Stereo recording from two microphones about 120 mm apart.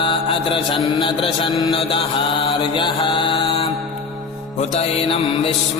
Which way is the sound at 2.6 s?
45° left (ahead or behind).